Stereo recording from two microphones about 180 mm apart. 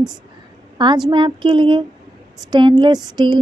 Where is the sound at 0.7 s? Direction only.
25° right (ahead or behind).